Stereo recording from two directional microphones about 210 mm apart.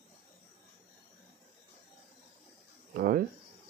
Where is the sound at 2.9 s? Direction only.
45° right (ahead or behind).